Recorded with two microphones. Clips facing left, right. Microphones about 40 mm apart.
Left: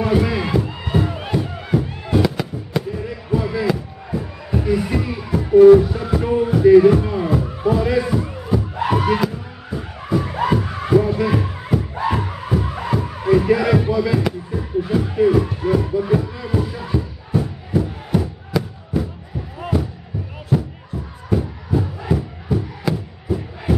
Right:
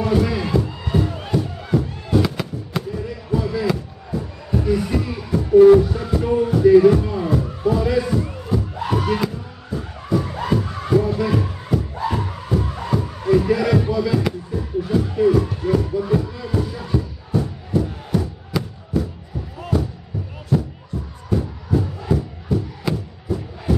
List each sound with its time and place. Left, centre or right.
0.0 s music: centre
2.2 s fireworks: centre
2.9 s slam: centre
8.8 s a sound: centre
9.3 s music: centre
19.6 s a sound: centre
20.4 s music: centre